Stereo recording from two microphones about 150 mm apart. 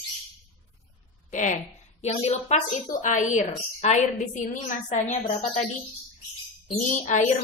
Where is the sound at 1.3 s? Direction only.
55° left (ahead or behind).